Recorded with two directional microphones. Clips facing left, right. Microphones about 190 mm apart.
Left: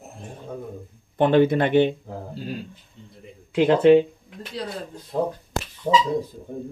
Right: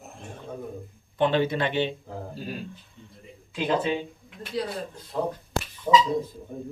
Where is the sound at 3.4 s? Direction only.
65° left (ahead or behind).